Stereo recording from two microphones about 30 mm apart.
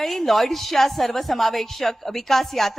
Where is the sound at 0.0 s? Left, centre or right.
Centre.